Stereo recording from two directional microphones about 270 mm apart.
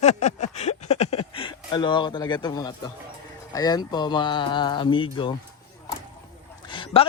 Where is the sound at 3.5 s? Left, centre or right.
Centre.